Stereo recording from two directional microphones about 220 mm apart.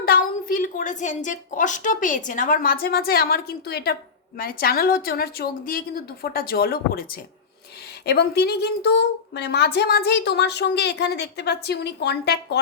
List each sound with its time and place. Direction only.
0.0 s a woman's voice: 40° left (ahead or behind)